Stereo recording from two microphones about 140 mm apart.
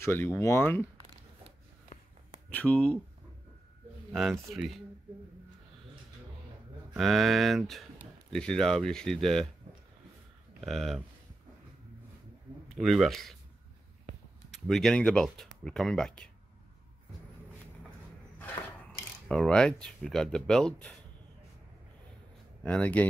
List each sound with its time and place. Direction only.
0.0 s speech: 20° left (ahead or behind)
2.5 s speech: 10° left (ahead or behind)
4.1 s speech: centre (ahead or behind)
6.9 s speech: centre (ahead or behind)
10.6 s speech: centre (ahead or behind)
12.6 s speech: centre (ahead or behind)
14.5 s speech: centre (ahead or behind)
18.4 s speech: 10° left (ahead or behind)
22.6 s speech: 10° left (ahead or behind)